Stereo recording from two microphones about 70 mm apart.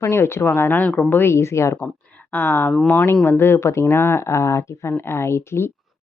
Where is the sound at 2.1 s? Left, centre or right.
Left.